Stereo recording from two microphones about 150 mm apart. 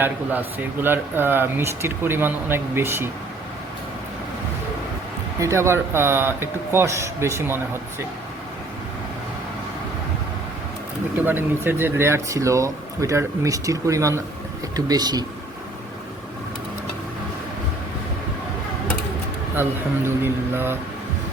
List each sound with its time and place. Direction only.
0.0 s speech: 10° right (ahead or behind)
5.4 s speech: 20° right (ahead or behind)
11.2 s speech: 15° right (ahead or behind)
20.1 s speech: 15° right (ahead or behind)